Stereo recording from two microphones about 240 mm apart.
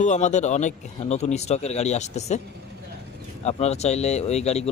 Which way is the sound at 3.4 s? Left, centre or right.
Left.